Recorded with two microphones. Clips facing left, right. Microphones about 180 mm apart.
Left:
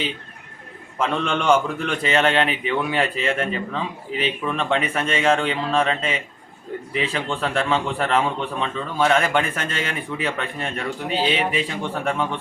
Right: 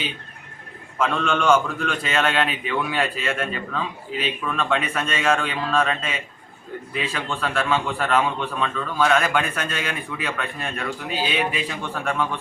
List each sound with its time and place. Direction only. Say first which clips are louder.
1.0 s a man's voice: even; 20° left (ahead or behind)